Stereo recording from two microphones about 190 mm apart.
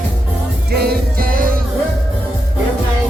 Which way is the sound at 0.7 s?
55° right (ahead or behind).